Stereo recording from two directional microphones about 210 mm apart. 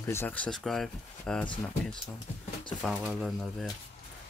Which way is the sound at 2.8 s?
Centre (ahead or behind).